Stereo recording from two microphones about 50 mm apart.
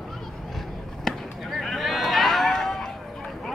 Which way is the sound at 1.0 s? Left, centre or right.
Centre.